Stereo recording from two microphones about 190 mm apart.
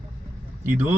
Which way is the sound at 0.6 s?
10° right (ahead or behind).